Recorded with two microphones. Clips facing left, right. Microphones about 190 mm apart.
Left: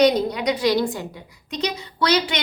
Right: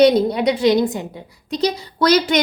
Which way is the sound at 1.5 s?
35° right (ahead or behind).